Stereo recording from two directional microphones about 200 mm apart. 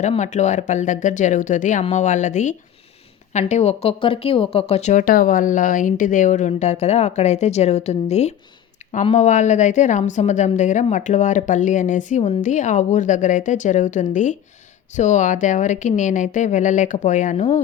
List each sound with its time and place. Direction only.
0.0 s a woman's voice: 35° left (ahead or behind)
8.8 s a sound: 35° left (ahead or behind)
9.1 s a woman's voice: 35° left (ahead or behind)